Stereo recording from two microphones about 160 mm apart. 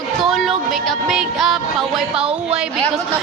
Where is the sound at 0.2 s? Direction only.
Centre (ahead or behind).